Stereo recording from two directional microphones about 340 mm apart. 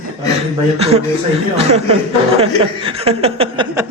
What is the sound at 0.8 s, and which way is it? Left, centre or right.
Speech, centre.